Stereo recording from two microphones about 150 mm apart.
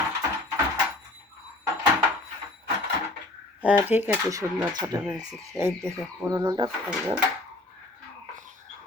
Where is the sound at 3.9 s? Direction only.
15° right (ahead or behind).